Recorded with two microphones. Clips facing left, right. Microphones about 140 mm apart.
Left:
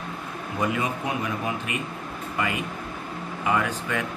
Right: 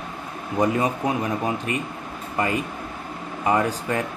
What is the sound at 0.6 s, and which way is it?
Speech, 35° right (ahead or behind).